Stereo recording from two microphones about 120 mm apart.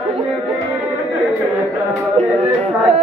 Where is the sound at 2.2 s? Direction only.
60° right (ahead or behind).